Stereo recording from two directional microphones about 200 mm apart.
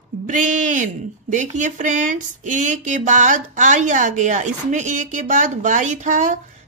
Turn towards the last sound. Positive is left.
turn(degrees=-40)  # may be behind; listen again after turning